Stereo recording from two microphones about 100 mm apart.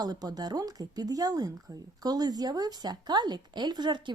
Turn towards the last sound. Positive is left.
turn(degrees=-50)  # may be behind; listen again after turning